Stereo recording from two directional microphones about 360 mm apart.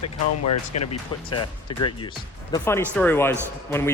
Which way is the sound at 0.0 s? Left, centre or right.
Left.